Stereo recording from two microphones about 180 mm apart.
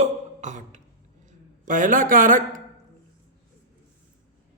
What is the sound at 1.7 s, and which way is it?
Speech, 45° right (ahead or behind).